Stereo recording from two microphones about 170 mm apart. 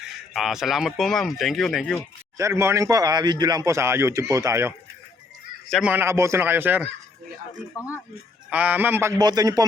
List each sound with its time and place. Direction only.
0.3 s speech: centre (ahead or behind)
2.4 s speech: 15° right (ahead or behind)
5.6 s a man's voice: centre (ahead or behind)
5.9 s a man's voice: 15° right (ahead or behind)
7.8 s speech: 15° left (ahead or behind)
8.4 s a man's voice: 10° right (ahead or behind)